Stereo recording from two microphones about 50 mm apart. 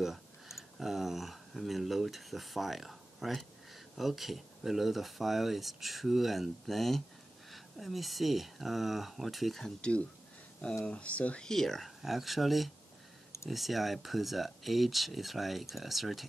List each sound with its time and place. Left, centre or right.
0.0 s speech: centre
9.8 s speech: centre
11.4 s speech: centre
12.0 s speech: centre